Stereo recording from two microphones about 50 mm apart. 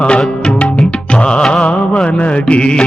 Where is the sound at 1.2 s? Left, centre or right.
Centre.